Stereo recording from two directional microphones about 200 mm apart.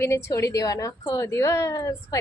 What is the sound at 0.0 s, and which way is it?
A woman's voice, 15° left (ahead or behind).